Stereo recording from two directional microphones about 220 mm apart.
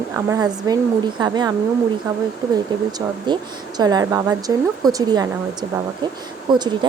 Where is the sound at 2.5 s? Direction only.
20° right (ahead or behind).